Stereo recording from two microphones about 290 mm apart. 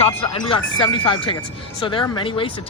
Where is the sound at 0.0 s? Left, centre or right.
Centre.